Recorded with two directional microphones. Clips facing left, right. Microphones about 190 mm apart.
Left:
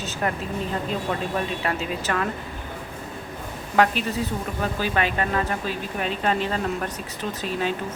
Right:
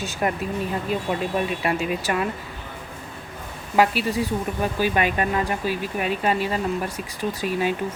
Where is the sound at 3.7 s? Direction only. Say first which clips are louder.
Right 1 dB; 10° right (ahead or behind).